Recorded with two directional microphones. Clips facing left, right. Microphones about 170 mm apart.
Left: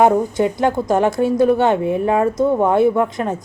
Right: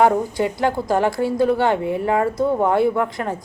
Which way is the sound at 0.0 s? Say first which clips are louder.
Left 3 dB; 20° left (ahead or behind).